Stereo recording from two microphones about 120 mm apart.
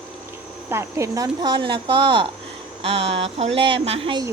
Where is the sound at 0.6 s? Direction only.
25° right (ahead or behind).